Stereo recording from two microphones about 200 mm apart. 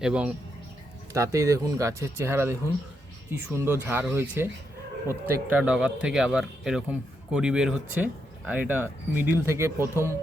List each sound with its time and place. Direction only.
0.0 s speech: 5° right (ahead or behind)
1.1 s speech: 15° right (ahead or behind)